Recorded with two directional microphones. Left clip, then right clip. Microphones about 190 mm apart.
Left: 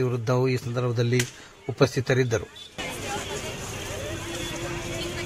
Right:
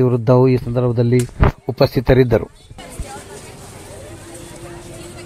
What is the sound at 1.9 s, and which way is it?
Speech, 35° right (ahead or behind).